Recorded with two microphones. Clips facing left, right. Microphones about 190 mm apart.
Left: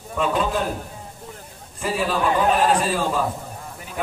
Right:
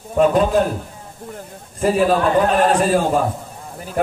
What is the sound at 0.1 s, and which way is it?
Speech, 45° right (ahead or behind).